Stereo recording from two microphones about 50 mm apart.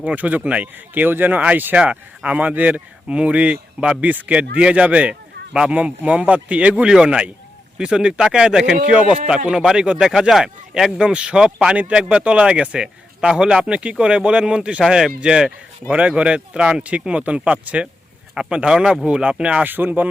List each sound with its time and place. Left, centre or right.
0.2 s a man's voice: right
6.8 s a man's voice: centre
19.6 s speech: right